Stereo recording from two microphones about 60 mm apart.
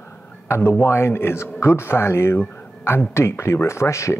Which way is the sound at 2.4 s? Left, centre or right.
Left.